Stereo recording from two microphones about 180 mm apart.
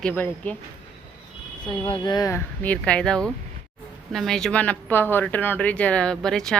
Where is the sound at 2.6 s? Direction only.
10° left (ahead or behind).